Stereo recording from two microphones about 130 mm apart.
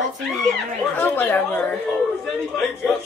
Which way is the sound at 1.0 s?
15° left (ahead or behind).